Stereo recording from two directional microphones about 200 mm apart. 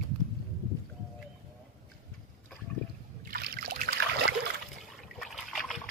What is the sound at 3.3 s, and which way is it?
Boat, 50° right (ahead or behind).